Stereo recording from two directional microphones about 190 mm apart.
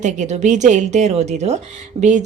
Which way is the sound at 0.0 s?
40° right (ahead or behind).